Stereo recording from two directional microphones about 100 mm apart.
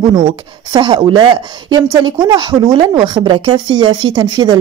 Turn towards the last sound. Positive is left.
turn(degrees=-45)  # may be behind; listen again after turning